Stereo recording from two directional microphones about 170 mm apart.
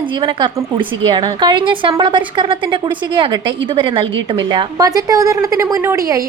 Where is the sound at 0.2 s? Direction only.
25° right (ahead or behind).